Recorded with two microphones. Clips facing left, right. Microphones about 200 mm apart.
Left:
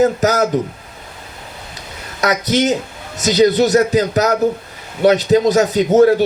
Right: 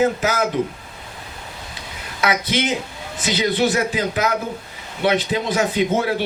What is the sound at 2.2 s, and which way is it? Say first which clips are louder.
Speech: left 5 dB; 40° left (ahead or behind).